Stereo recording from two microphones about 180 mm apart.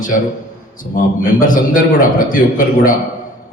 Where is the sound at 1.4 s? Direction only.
50° left (ahead or behind).